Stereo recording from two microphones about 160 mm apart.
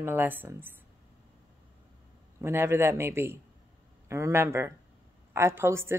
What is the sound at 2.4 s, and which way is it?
A woman's voice, 15° right (ahead or behind).